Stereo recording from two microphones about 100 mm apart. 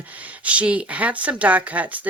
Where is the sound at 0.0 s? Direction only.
15° right (ahead or behind).